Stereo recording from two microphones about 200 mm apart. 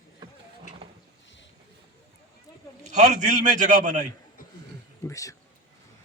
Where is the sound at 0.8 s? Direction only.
25° right (ahead or behind).